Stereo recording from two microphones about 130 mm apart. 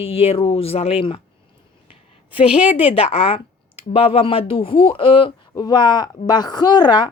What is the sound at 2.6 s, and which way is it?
A woman's voice, 45° left (ahead or behind).